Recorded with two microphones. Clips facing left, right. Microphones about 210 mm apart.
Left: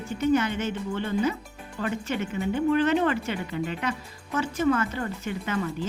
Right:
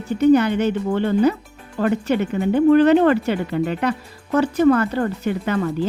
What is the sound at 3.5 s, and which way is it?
Speech, 50° right (ahead or behind).